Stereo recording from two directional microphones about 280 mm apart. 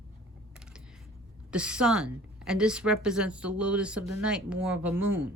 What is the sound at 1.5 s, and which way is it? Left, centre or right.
A woman's voice, centre.